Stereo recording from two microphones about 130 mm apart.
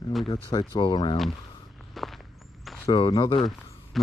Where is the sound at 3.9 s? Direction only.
Centre (ahead or behind).